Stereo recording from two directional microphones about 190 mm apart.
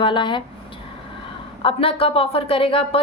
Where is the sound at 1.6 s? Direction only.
30° left (ahead or behind).